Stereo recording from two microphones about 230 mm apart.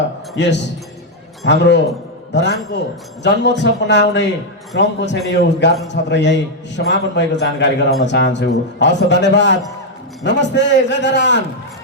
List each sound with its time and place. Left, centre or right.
0.3 s a man's voice: left